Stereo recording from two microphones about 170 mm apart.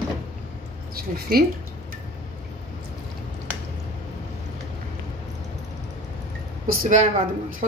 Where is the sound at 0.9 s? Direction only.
60° right (ahead or behind).